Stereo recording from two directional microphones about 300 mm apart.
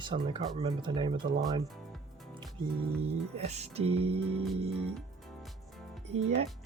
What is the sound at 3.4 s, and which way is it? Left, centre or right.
Music, right.